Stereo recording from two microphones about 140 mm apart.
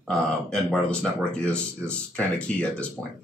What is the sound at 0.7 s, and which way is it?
Speech, 5° left (ahead or behind).